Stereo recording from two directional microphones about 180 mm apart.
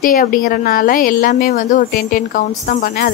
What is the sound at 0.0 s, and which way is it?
A woman's voice, 50° left (ahead or behind).